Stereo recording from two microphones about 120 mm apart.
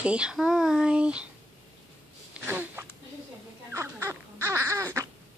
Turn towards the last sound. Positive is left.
turn(degrees=-25)  # may be behind; listen again after turning